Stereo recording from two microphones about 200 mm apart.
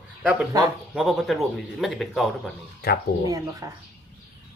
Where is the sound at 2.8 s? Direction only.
50° left (ahead or behind).